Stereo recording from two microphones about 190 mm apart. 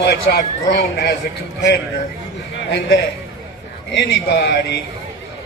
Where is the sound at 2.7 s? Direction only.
60° left (ahead or behind).